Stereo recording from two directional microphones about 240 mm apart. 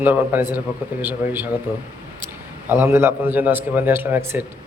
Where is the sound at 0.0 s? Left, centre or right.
Centre.